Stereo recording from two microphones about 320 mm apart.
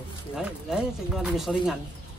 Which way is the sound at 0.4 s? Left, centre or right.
Centre.